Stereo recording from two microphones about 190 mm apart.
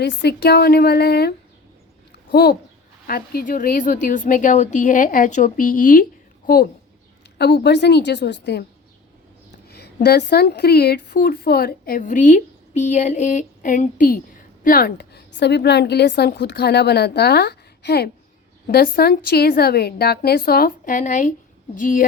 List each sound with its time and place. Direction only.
0.0 s a woman's voice: 60° left (ahead or behind)
7.3 s a woman's voice: 60° left (ahead or behind)
9.6 s a woman's voice: 60° left (ahead or behind)